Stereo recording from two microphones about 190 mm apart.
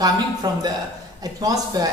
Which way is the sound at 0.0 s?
20° right (ahead or behind).